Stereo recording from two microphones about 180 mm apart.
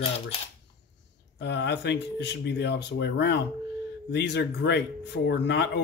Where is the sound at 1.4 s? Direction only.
70° left (ahead or behind).